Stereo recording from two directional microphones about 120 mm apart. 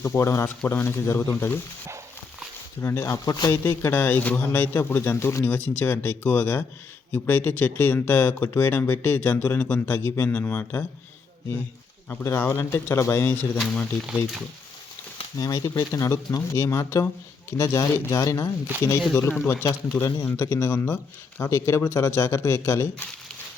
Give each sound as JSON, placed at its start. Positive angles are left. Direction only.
{"t": 0.0, "sound": "speech", "side_deg": 25}
{"t": 2.8, "sound": "speech", "side_deg": 25}
{"t": 3.5, "sound": "speech", "side_deg": 20}
{"t": 12.0, "sound": "speech", "side_deg": 20}
{"t": 13.6, "sound": "speech", "side_deg": 5}
{"t": 15.4, "sound": "speech", "side_deg": 35}